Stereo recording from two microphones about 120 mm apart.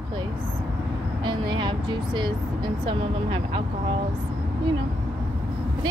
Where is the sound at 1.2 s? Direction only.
40° right (ahead or behind).